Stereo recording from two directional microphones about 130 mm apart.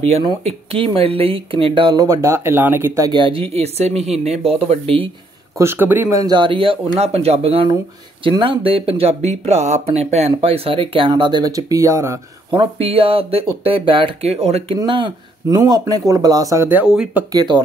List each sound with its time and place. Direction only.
0.1 s speech: 55° right (ahead or behind)
2.0 s speech: 20° right (ahead or behind)
3.1 s speech: 40° right (ahead or behind)
5.6 s speech: 20° right (ahead or behind)
6.2 s speech: 35° right (ahead or behind)
12.4 s speech: 45° right (ahead or behind)
14.9 s speech: 40° right (ahead or behind)
15.4 s speech: 30° right (ahead or behind); by 17.2 s 5° right (ahead or behind)
17.3 s speech: 35° right (ahead or behind)